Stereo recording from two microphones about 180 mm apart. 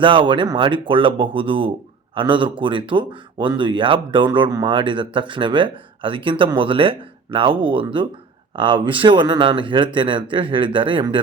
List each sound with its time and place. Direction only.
0.0 s speech: 25° right (ahead or behind)